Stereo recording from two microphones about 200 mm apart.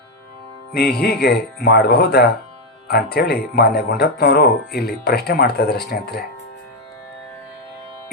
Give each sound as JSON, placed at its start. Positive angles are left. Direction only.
{"t": 0.7, "sound": "speech", "side_deg": 50}